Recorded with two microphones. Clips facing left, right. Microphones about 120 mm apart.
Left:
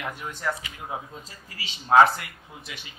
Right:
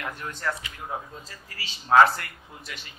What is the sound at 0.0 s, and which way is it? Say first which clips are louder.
A man's voice: left 1 dB; 10° left (ahead or behind).